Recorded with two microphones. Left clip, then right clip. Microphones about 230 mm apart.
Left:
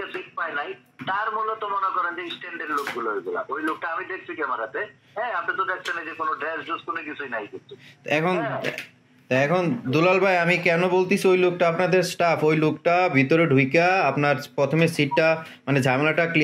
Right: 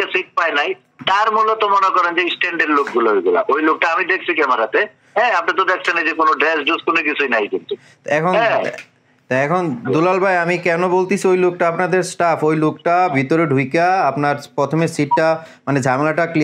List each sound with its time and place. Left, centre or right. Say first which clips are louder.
0.0 s a man's voice: right 12 dB; right
8.1 s speech: right 6 dB; centre
8.4 s a man's voice: right 12 dB; right
9.3 s speech: right 4 dB; centre